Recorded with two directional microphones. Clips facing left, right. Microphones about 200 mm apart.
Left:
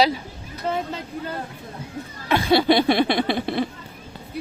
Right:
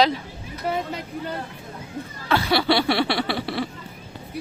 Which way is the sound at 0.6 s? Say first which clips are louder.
Even; 10° right (ahead or behind).